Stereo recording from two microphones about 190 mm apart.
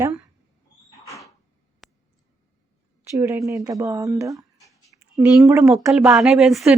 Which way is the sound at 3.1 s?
15° right (ahead or behind).